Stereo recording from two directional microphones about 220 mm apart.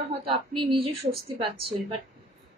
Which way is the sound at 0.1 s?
25° right (ahead or behind).